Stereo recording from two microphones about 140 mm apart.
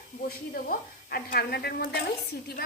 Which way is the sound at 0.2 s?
90° left.